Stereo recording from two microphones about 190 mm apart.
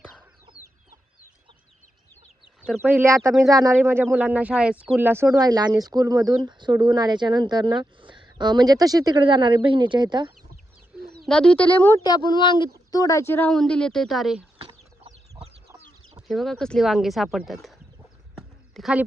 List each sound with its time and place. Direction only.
2.6 s a sound: 5° left (ahead or behind)
2.8 s speech: 10° right (ahead or behind)
11.1 s speech: 5° left (ahead or behind)
12.0 s a woman's voice: 20° left (ahead or behind); by 14.4 s centre (ahead or behind)
16.2 s a woman's voice: centre (ahead or behind)